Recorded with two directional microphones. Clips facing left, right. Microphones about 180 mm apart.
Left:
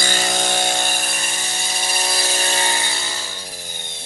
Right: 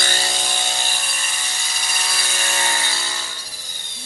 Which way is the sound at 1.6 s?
30° left (ahead or behind).